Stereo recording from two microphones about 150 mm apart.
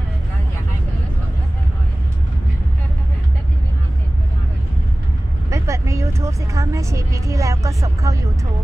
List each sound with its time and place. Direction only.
5.5 s vehicle: 20° right (ahead or behind)